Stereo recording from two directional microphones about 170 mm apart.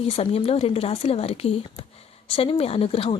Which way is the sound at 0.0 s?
35° left (ahead or behind).